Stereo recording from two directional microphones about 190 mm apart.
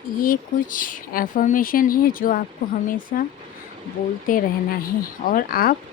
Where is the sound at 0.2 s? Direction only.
45° left (ahead or behind).